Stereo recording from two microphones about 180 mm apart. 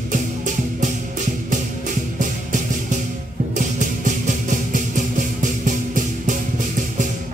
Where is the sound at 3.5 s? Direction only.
45° right (ahead or behind).